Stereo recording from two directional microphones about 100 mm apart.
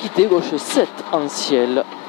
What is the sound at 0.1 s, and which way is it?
Speech, 15° left (ahead or behind).